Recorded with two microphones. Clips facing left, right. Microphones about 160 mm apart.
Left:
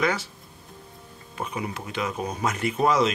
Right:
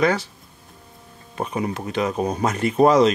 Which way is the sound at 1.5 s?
35° right (ahead or behind).